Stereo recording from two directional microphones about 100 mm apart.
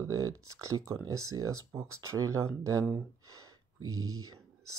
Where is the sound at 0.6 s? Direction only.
30° right (ahead or behind).